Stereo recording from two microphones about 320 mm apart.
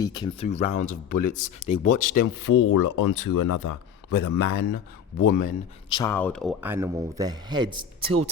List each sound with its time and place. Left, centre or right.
0.0 s speech: centre
2.1 s speech: left
5.2 s speech: left
6.0 s speech: centre